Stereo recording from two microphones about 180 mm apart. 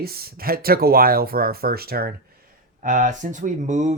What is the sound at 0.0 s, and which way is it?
Speech, 60° right (ahead or behind).